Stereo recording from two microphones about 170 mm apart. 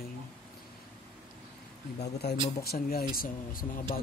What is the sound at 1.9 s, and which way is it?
Speech, 70° left (ahead or behind).